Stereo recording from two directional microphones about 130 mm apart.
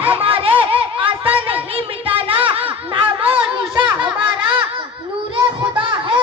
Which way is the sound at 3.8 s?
40° right (ahead or behind).